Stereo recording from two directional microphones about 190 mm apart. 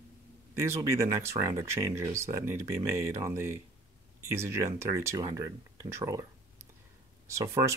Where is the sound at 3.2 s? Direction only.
15° right (ahead or behind).